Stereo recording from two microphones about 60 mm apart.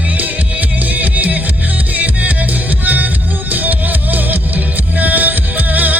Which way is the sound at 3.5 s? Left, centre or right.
Right.